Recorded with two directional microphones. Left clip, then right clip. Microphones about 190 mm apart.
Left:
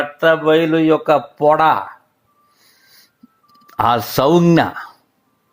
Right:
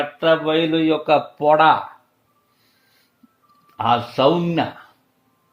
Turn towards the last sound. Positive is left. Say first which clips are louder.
# left 4 dB
turn(degrees=45)  # may be behind; listen again after turning